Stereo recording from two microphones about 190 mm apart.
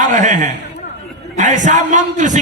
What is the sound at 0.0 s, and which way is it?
Speech, 40° right (ahead or behind).